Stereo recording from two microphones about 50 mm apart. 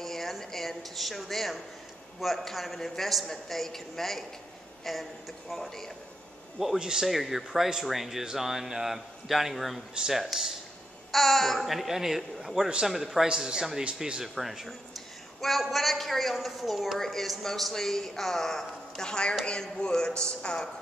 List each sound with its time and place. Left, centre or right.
0.0 s a sound: centre
2.1 s a woman's voice: centre
6.8 s speech: centre
7.1 s a woman's voice: centre